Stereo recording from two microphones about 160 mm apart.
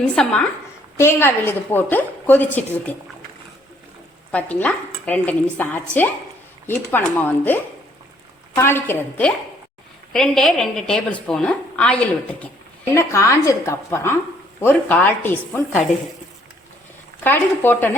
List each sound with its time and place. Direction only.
0.2 s a woman's voice: 5° left (ahead or behind)
0.9 s a woman's voice: 15° left (ahead or behind)
4.3 s a woman's voice: 10° left (ahead or behind)
12.9 s a woman's voice: 15° left (ahead or behind)
17.2 s a woman's voice: 10° left (ahead or behind)